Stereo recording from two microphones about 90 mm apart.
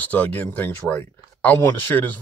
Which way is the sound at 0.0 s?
20° left (ahead or behind).